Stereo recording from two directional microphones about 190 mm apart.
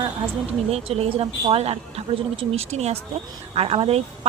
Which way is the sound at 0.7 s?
30° right (ahead or behind).